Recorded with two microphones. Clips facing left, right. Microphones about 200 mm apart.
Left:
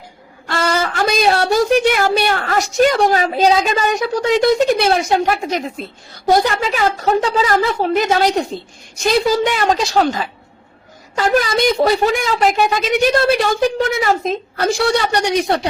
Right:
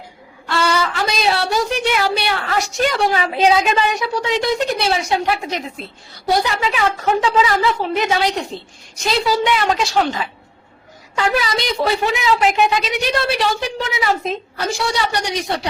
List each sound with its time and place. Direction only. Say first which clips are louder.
0.4 s a woman's voice: left 1 dB; 45° left (ahead or behind)